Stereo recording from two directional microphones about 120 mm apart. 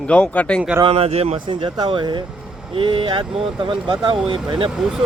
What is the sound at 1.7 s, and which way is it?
Speech, 35° right (ahead or behind).